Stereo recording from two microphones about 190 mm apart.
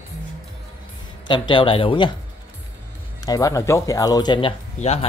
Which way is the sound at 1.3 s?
25° left (ahead or behind).